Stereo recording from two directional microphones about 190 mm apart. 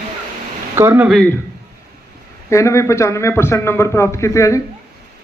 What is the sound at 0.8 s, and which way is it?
Speech, 10° right (ahead or behind).